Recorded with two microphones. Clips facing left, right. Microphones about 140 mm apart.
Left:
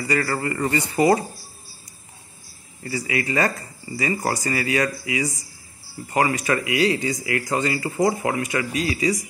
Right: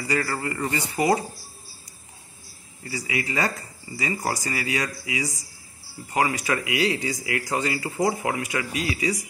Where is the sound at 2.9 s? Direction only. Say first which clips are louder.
Left 4 dB; 15° right (ahead or behind).